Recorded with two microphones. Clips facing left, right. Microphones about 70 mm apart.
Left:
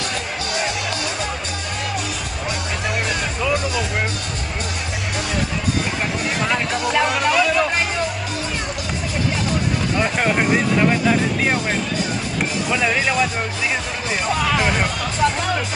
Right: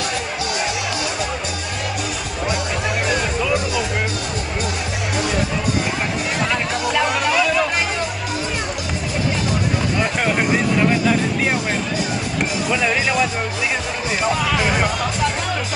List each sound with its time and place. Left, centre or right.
3.1 s music: centre
6.5 s music: centre
9.9 s a sound: centre
12.6 s speech: centre
14.3 s speech: centre